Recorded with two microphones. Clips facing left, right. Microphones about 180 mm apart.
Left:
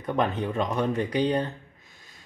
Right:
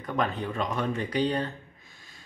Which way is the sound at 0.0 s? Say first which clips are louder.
Left 3 dB; 20° left (ahead or behind).